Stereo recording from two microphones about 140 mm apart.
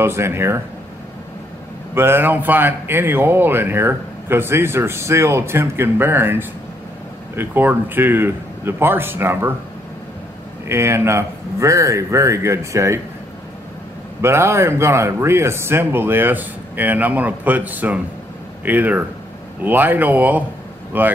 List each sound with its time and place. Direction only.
0.0 s speech: 15° right (ahead or behind)
2.0 s speech: 15° right (ahead or behind)
10.7 s speech: 20° right (ahead or behind)
14.2 s speech: 20° right (ahead or behind)